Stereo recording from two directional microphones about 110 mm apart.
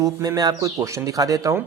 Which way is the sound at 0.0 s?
35° right (ahead or behind).